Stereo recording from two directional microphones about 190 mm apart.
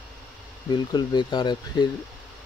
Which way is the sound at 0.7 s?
25° left (ahead or behind).